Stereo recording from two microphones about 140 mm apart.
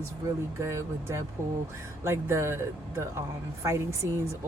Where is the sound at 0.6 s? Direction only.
20° right (ahead or behind).